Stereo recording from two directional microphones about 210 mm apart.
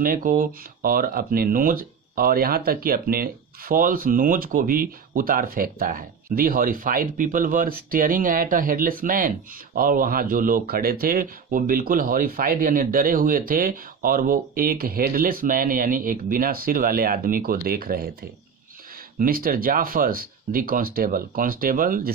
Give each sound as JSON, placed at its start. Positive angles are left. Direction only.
{"t": 0.0, "sound": "speech", "side_deg": -40}
{"t": 19.1, "sound": "speech", "side_deg": -45}